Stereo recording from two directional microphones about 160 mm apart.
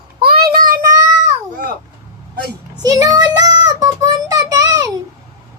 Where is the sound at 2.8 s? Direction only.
25° right (ahead or behind).